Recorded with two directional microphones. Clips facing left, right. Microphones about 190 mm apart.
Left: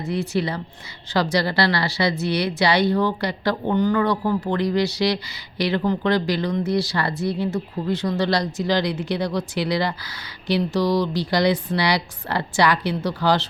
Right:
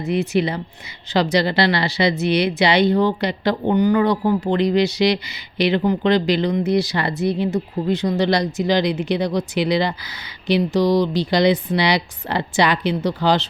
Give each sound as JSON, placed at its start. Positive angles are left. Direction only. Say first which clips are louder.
{"t": 0.1, "sound": "speech", "louder": "right 4 dB", "side_deg": -20}